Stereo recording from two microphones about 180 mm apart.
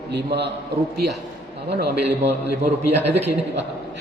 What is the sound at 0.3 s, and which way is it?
Speech, 65° right (ahead or behind).